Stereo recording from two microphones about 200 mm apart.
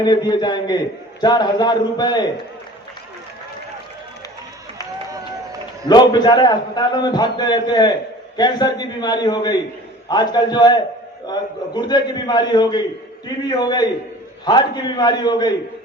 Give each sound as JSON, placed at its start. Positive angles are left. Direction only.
{"t": 0.0, "sound": "a man's voice", "side_deg": 20}
{"t": 5.9, "sound": "a man's voice", "side_deg": 20}